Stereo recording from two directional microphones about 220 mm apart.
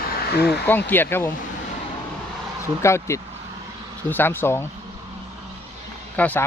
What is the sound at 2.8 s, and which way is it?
Speech, 10° left (ahead or behind).